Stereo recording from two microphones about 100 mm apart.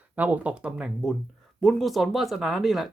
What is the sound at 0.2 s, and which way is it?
Speech, 15° right (ahead or behind).